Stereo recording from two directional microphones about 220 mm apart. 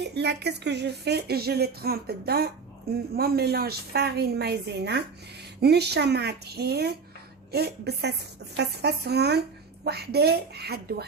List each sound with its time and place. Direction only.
0.0 s speech: 50° right (ahead or behind)